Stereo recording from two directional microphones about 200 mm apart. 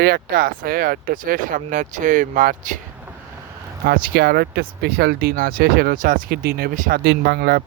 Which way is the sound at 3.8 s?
50° right (ahead or behind).